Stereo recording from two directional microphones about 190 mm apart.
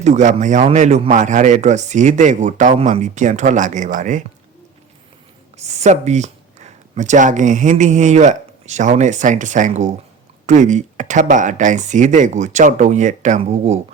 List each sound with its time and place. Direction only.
0.0 s a man's voice: 40° right (ahead or behind)
5.5 s a man's voice: 35° right (ahead or behind)